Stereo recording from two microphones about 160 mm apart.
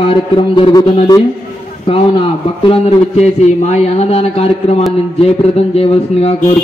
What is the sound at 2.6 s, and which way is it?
A man's voice, 35° left (ahead or behind).